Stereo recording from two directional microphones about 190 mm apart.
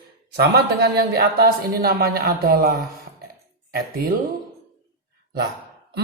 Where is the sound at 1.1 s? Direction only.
55° right (ahead or behind).